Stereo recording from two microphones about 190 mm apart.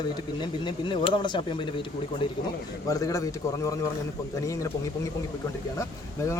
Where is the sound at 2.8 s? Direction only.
15° left (ahead or behind).